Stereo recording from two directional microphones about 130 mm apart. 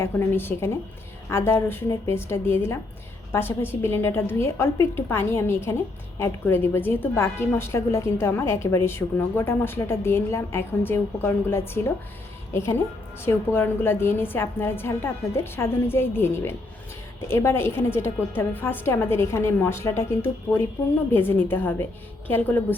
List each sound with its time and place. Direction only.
0.0 s a woman's voice: 20° left (ahead or behind)
13.2 s a woman's voice: 15° left (ahead or behind)